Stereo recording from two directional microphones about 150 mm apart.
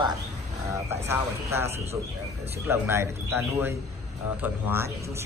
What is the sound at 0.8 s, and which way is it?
Speech, 15° right (ahead or behind).